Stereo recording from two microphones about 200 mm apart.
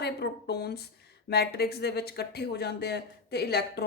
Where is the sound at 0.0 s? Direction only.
55° left (ahead or behind).